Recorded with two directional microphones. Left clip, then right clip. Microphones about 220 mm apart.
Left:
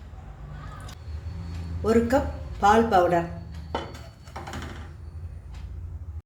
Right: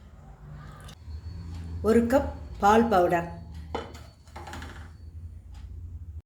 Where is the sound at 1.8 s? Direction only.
15° right (ahead or behind).